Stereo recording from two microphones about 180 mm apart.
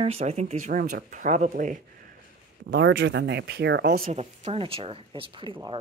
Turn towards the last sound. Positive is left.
turn(degrees=-25)  # may be behind; listen again after turning